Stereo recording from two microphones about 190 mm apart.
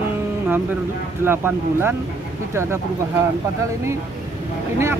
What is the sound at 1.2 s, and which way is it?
Speech, 10° right (ahead or behind).